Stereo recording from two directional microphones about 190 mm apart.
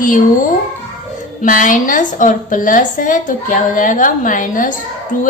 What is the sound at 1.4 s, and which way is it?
A woman's voice, 45° left (ahead or behind).